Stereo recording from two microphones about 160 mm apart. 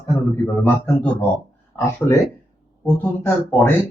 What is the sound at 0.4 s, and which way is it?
Speech, 10° left (ahead or behind).